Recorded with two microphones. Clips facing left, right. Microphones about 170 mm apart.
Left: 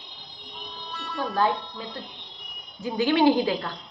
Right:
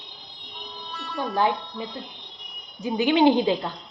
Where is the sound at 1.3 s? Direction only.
15° right (ahead or behind).